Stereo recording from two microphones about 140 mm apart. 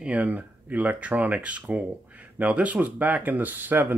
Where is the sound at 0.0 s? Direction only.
10° right (ahead or behind).